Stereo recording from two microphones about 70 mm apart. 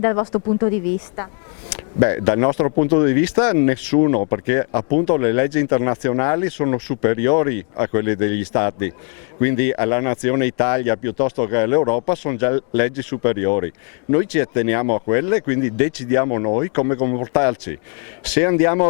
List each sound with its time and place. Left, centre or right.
0.0 s speech: left
0.7 s speech: left